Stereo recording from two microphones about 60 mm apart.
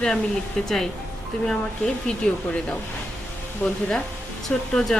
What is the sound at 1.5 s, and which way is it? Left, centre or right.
A woman's voice, centre.